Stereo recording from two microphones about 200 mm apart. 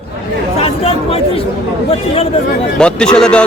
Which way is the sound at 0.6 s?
30° left (ahead or behind).